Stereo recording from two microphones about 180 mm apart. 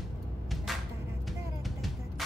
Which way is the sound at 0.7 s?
Centre (ahead or behind).